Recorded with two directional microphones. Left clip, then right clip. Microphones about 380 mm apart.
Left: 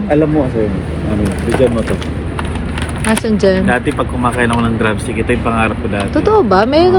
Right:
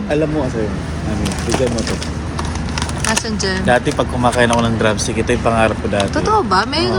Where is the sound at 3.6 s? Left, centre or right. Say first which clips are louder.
Even; right.